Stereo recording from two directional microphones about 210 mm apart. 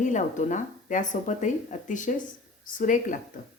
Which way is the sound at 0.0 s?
35° left (ahead or behind).